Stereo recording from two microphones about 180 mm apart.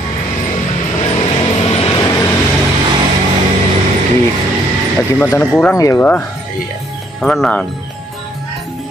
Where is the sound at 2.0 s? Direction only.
20° left (ahead or behind).